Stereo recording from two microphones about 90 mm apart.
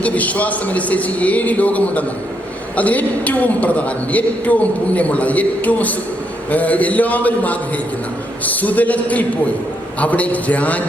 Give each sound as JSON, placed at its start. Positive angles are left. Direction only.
{"t": 0.0, "sound": "a woman's voice", "side_deg": 15}